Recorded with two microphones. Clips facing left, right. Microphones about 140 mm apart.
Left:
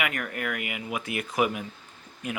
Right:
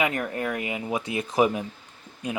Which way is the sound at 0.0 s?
25° right (ahead or behind).